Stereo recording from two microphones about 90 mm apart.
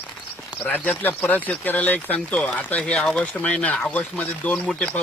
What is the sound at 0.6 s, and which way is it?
Speech, 20° left (ahead or behind).